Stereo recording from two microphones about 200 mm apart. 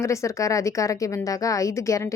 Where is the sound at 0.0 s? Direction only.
15° left (ahead or behind).